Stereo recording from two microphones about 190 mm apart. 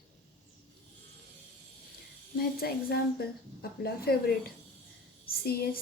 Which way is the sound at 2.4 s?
55° left (ahead or behind).